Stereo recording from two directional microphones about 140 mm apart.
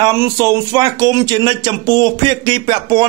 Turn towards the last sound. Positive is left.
turn(degrees=-35)  # may be behind; listen again after turning